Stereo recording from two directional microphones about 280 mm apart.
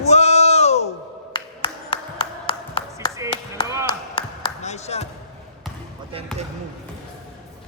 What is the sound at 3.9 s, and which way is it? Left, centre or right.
Ping, centre.